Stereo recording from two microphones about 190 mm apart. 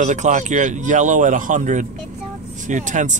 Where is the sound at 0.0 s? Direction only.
40° right (ahead or behind).